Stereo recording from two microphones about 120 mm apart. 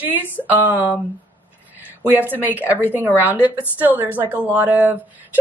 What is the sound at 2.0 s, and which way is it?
A woman's voice, 15° right (ahead or behind).